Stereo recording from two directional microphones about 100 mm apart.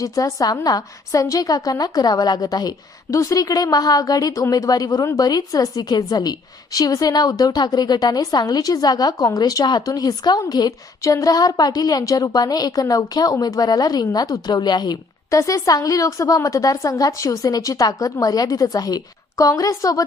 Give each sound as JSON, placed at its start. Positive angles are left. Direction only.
{"t": 0.0, "sound": "a woman's voice", "side_deg": 35}
{"t": 15.4, "sound": "a woman's voice", "side_deg": 35}